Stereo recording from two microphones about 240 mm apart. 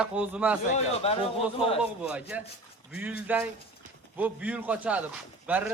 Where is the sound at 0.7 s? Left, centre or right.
Left.